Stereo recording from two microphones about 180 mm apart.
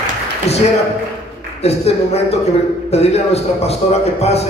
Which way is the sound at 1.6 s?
35° left (ahead or behind).